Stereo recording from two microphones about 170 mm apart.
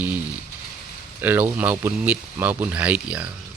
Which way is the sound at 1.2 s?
10° right (ahead or behind).